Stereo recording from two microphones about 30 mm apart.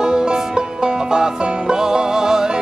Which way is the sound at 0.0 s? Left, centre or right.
Right.